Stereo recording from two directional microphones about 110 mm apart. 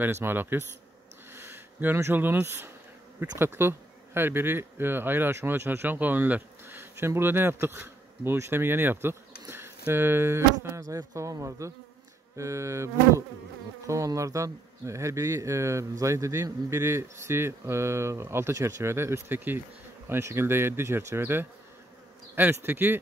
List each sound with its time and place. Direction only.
0.0 s speech: 20° right (ahead or behind)